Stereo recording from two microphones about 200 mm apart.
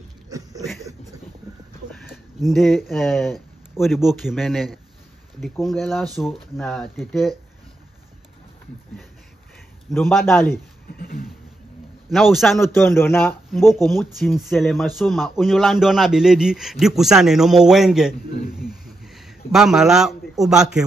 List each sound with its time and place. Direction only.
2.4 s a man's voice: centre (ahead or behind)
9.9 s a man's voice: 5° left (ahead or behind)
11.0 s a sound: 45° left (ahead or behind)
12.1 s a man's voice: centre (ahead or behind)
12.6 s a man's voice: 10° left (ahead or behind)
14.1 s a man's voice: centre (ahead or behind)